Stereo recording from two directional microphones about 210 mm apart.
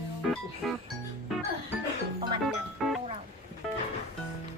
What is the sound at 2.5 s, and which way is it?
Music, centre (ahead or behind).